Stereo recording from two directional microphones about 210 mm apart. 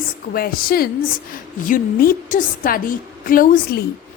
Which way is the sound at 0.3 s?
45° left (ahead or behind).